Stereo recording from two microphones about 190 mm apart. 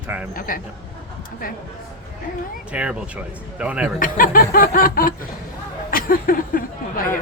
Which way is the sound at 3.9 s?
45° left (ahead or behind).